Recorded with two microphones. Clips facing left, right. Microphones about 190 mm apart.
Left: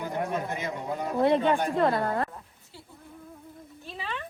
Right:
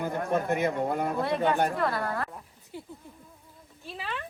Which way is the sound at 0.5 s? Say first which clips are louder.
Right 6 dB; 60° right (ahead or behind).